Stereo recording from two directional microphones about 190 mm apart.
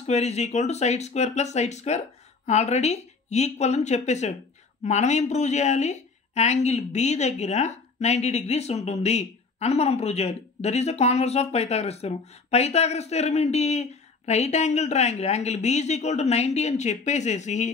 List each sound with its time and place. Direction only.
0.0 s speech: 35° left (ahead or behind)